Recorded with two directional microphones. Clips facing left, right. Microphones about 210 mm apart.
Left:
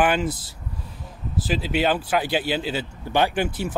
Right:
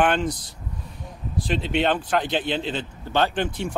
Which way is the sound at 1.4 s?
5° left (ahead or behind).